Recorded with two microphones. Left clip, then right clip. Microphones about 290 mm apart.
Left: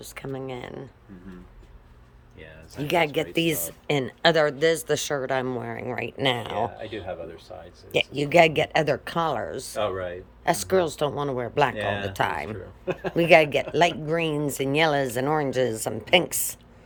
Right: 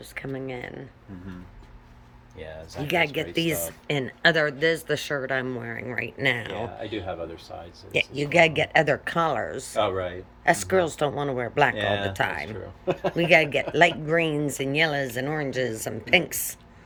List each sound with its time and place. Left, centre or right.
0.1 s speech: centre
2.8 s speech: centre
7.9 s speech: centre
9.7 s speech: right
10.4 s speech: centre
11.8 s speech: right
12.1 s speech: centre
12.8 s speech: right
13.1 s speech: centre